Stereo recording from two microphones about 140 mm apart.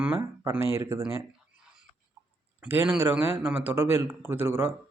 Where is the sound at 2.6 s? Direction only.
15° right (ahead or behind).